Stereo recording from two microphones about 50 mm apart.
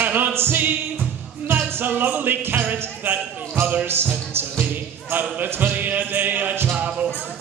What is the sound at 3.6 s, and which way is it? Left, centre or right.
Speech, right.